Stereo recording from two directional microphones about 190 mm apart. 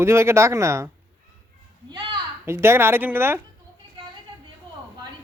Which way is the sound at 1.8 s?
25° right (ahead or behind).